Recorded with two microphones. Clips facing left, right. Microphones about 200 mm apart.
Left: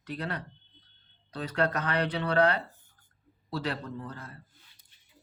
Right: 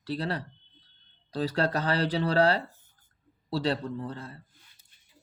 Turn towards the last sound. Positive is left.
turn(degrees=-30)  # may be behind; listen again after turning